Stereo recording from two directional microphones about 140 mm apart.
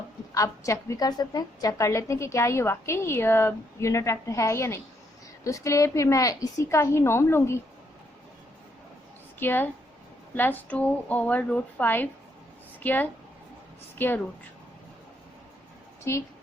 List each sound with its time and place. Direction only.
0.3 s a woman's voice: 20° left (ahead or behind)
9.4 s a woman's voice: 15° left (ahead or behind)
16.1 s a woman's voice: 20° left (ahead or behind)